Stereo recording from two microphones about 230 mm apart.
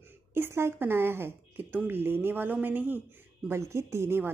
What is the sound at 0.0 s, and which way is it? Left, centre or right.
A woman's voice, centre.